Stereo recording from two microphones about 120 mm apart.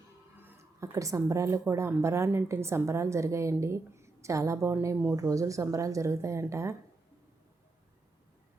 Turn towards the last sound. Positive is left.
turn(degrees=-25)  # may be behind; listen again after turning